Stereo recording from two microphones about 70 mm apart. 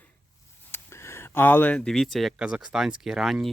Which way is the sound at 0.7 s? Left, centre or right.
Left.